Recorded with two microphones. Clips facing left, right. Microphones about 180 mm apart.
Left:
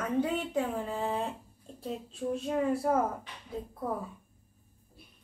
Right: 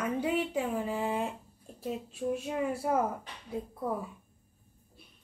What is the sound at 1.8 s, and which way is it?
Speech, 5° right (ahead or behind).